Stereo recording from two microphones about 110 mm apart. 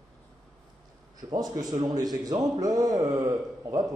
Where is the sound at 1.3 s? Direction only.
35° right (ahead or behind).